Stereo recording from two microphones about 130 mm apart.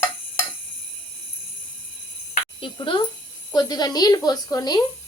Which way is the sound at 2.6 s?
40° left (ahead or behind).